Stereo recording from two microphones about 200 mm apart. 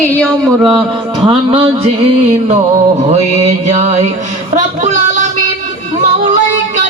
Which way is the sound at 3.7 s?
35° right (ahead or behind).